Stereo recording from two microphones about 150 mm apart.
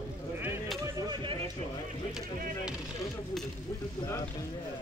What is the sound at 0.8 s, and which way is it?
Speech, 30° right (ahead or behind).